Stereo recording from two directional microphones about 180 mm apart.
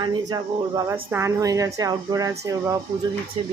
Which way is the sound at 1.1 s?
15° right (ahead or behind).